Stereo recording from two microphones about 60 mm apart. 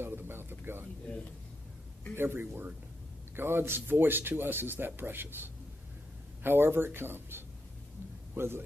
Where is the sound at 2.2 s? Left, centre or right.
Right.